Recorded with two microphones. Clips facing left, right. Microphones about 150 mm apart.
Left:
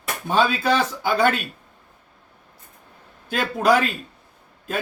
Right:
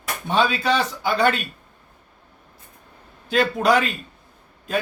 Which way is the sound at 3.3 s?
Centre (ahead or behind).